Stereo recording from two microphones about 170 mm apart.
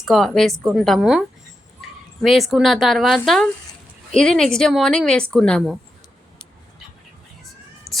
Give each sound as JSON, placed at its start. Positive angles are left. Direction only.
{"t": 0.0, "sound": "a woman's voice", "side_deg": 0}
{"t": 2.2, "sound": "a woman's voice", "side_deg": 0}
{"t": 7.9, "sound": "music", "side_deg": -20}